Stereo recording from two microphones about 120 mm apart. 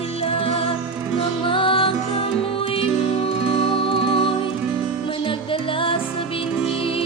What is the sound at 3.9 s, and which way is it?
Music, 45° left (ahead or behind).